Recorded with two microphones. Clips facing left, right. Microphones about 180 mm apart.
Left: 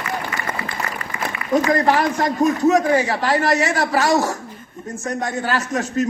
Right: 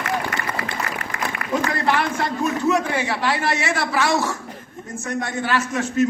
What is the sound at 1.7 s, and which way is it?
A man's voice, 40° left (ahead or behind).